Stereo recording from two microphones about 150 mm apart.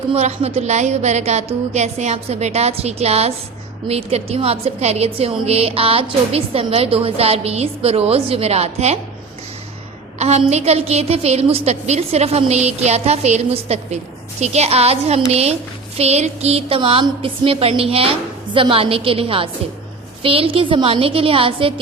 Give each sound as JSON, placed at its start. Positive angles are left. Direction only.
{"t": 0.1, "sound": "a woman's voice", "side_deg": -45}
{"t": 10.2, "sound": "a woman's voice", "side_deg": -45}